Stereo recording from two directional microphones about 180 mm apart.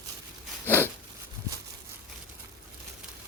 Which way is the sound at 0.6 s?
10° left (ahead or behind).